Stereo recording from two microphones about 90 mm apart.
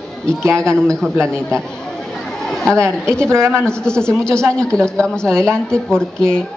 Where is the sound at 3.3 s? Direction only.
30° right (ahead or behind).